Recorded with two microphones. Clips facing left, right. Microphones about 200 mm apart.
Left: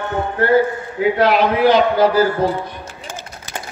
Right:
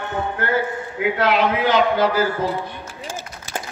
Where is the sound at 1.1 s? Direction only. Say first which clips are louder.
Left 3 dB; 35° left (ahead or behind).